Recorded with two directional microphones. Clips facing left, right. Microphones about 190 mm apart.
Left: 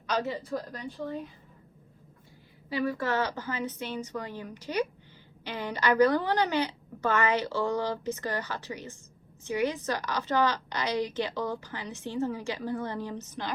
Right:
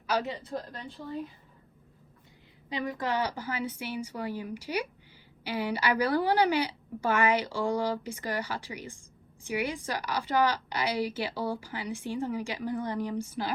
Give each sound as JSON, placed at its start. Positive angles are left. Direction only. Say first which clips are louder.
{"t": 0.1, "sound": "a woman's voice", "louder": "left 1 dB", "side_deg": -15}
{"t": 2.6, "sound": "a woman's voice", "louder": "left 3 dB", "side_deg": -20}